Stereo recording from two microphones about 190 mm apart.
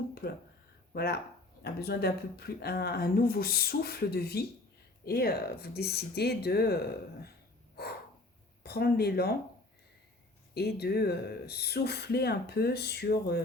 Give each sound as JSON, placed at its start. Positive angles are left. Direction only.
{"t": 0.1, "sound": "a sound", "side_deg": 55}
{"t": 0.9, "sound": "speech", "side_deg": 55}
{"t": 8.6, "sound": "speech", "side_deg": 55}
{"t": 10.5, "sound": "speech", "side_deg": 55}